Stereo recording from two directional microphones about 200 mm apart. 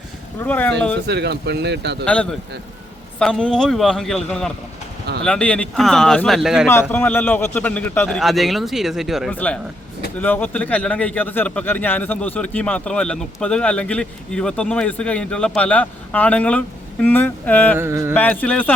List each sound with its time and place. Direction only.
0.3 s a man's voice: 10° left (ahead or behind)
1.0 s speech: 55° right (ahead or behind)
3.2 s a man's voice: 5° left (ahead or behind)
6.7 s a man's voice: 10° left (ahead or behind)
17.7 s mantra: 10° right (ahead or behind)
18.1 s a man's voice: 10° left (ahead or behind)